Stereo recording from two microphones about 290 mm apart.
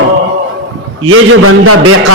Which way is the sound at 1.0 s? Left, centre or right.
Right.